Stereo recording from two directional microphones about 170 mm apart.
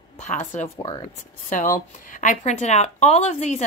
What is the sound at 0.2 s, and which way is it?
Speech, 45° left (ahead or behind).